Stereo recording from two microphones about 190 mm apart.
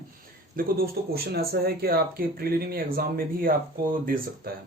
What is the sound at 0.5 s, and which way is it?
Speech, 50° right (ahead or behind).